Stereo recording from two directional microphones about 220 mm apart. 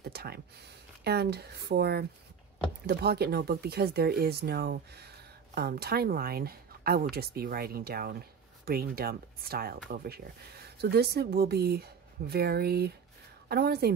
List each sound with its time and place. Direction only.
0.0 s speech: 45° right (ahead or behind)